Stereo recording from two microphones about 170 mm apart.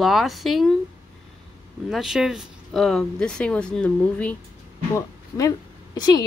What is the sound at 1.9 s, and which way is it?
Speech, centre (ahead or behind).